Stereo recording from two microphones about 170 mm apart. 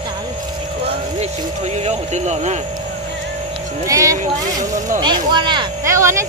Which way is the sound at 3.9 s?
20° right (ahead or behind).